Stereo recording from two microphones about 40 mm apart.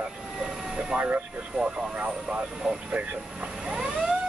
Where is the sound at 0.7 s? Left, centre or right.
Right.